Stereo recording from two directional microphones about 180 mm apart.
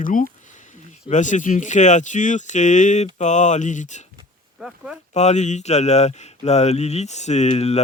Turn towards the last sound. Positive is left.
turn(degrees=35)  # may be behind; listen again after turning